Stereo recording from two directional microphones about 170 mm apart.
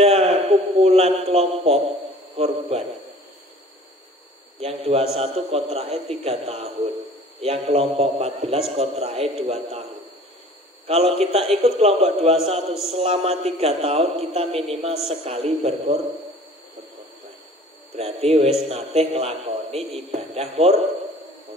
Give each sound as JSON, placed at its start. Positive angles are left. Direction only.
{"t": 0.0, "sound": "a sound", "side_deg": -35}
{"t": 2.3, "sound": "a man's voice", "side_deg": -35}
{"t": 4.6, "sound": "a man's voice", "side_deg": -35}
{"t": 10.9, "sound": "a man's voice", "side_deg": -35}
{"t": 12.5, "sound": "a man's voice", "side_deg": 0}
{"t": 12.9, "sound": "a man's voice", "side_deg": -35}
{"t": 17.9, "sound": "a man's voice", "side_deg": -35}